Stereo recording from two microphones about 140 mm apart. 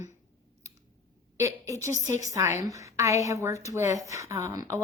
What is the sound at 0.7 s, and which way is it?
Clicking, 20° right (ahead or behind).